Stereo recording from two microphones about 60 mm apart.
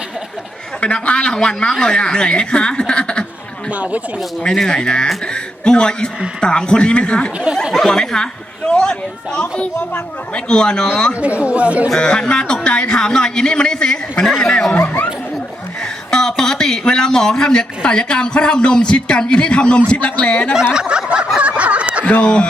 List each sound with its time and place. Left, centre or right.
0.8 s a man's voice: centre
3.7 s speech: right
4.4 s a man's voice: centre
7.5 s speech: centre
7.9 s a man's voice: centre
11.2 s speech: right
11.9 s a man's voice: centre
14.7 s speech: left
16.1 s a man's voice: centre
20.7 s a sound: centre
22.2 s a man's voice: centre